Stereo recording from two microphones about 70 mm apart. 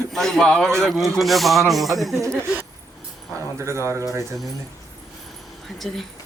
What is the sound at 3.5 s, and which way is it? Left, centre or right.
Speech, right.